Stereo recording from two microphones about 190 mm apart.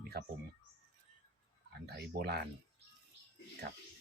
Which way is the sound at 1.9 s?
55° right (ahead or behind).